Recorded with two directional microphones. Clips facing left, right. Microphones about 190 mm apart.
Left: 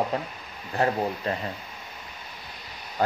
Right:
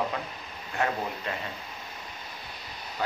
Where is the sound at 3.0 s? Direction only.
45° left (ahead or behind).